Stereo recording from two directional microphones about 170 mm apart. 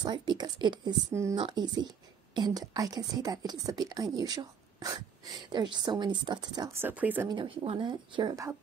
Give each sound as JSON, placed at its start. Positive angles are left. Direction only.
{"t": 0.0, "sound": "speech", "side_deg": -25}
{"t": 7.2, "sound": "speech", "side_deg": -30}